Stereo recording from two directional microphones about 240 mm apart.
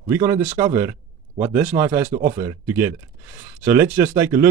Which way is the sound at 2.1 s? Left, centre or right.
Right.